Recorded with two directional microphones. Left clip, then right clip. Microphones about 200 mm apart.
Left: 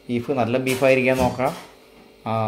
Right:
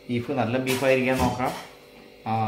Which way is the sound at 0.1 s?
45° left (ahead or behind).